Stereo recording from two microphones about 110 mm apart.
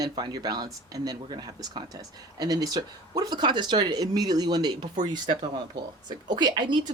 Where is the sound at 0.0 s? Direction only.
40° right (ahead or behind).